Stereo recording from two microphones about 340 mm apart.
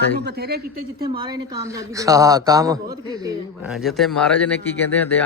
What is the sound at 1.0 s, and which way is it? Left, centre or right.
A woman's voice, centre.